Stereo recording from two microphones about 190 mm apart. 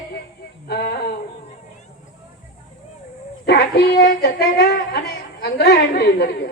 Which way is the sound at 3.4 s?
60° left (ahead or behind).